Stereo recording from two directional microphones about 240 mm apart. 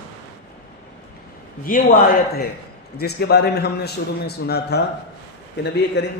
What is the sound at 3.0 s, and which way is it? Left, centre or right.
A man's voice, left.